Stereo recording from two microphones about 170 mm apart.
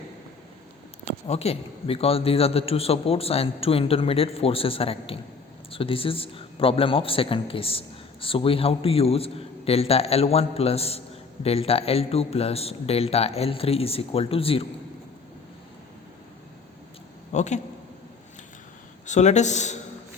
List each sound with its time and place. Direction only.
1.3 s a man's voice: 35° left (ahead or behind)
17.3 s a man's voice: 45° left (ahead or behind)
19.0 s a man's voice: 45° left (ahead or behind)